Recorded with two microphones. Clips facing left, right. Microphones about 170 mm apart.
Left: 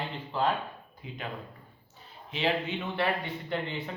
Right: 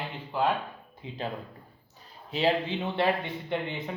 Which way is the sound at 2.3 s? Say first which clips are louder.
Right 3 dB; 35° right (ahead or behind).